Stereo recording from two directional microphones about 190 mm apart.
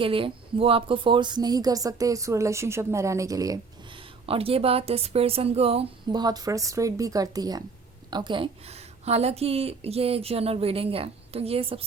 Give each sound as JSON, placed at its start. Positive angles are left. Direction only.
{"t": 0.0, "sound": "speech", "side_deg": -25}
{"t": 4.3, "sound": "a woman's voice", "side_deg": -30}